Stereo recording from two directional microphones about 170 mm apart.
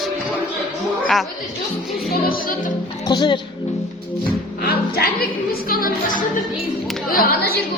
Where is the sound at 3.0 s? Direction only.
25° left (ahead or behind).